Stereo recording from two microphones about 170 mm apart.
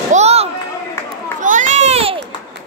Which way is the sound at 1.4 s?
50° right (ahead or behind).